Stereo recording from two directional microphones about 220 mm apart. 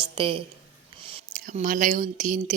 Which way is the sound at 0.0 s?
25° right (ahead or behind).